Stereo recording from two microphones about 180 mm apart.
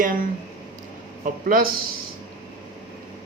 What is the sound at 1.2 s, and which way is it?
Speech, 50° right (ahead or behind).